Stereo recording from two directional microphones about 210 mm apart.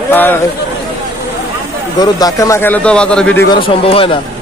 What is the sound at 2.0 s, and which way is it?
A man's voice, 15° left (ahead or behind).